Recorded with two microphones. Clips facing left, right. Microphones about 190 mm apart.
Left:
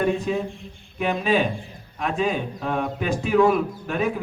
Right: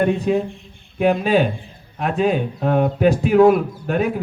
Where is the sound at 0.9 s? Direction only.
45° right (ahead or behind).